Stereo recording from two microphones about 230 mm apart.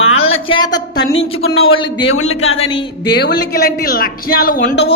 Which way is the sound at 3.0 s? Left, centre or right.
Left.